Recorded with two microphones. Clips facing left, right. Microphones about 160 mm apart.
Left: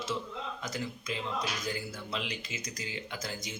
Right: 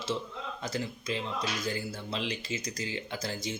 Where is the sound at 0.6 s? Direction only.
30° right (ahead or behind).